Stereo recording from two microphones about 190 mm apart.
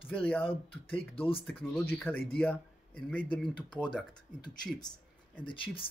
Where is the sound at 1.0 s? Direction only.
30° left (ahead or behind).